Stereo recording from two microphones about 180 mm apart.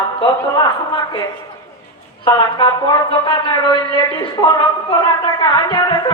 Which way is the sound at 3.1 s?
25° left (ahead or behind).